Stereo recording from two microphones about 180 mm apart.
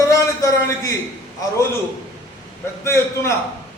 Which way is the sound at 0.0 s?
15° left (ahead or behind).